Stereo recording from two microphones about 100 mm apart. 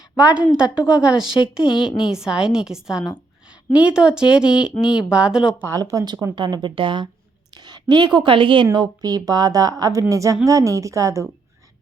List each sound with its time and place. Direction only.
0.2 s a woman's voice: 10° right (ahead or behind)
5.6 s a woman's voice: 35° right (ahead or behind)
6.3 s a woman's voice: 50° right (ahead or behind)
8.7 s a woman's voice: 40° right (ahead or behind)